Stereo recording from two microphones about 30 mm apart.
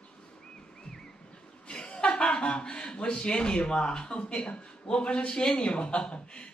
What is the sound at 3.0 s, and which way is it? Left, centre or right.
Speech, left.